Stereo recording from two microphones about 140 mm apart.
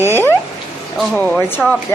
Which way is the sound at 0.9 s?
10° left (ahead or behind).